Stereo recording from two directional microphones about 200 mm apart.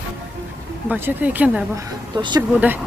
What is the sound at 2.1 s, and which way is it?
Speech, 20° right (ahead or behind).